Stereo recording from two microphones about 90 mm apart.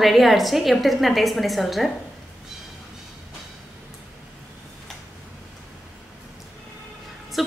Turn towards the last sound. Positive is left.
turn(degrees=0)  # may be behind; listen again after turning